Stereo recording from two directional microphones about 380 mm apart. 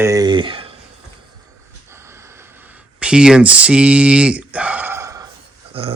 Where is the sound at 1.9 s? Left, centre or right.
Centre.